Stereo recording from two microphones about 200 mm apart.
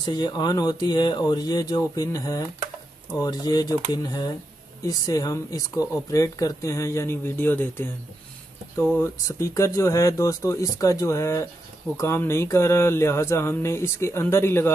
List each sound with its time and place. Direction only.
0.0 s speech: 20° left (ahead or behind)
8.9 s speech: 15° left (ahead or behind)